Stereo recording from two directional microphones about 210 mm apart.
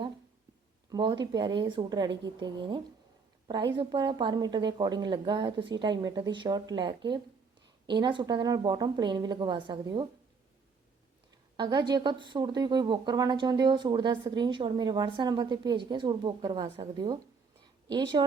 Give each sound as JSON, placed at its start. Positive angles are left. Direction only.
{"t": 0.9, "sound": "speech", "side_deg": -20}
{"t": 11.5, "sound": "speech", "side_deg": -20}